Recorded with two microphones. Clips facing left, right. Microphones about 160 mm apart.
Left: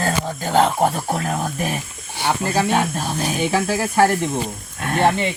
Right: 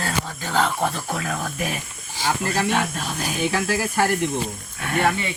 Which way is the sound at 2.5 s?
40° left (ahead or behind).